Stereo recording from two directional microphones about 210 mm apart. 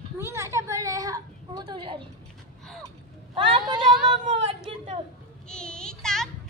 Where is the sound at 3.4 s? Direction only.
25° right (ahead or behind).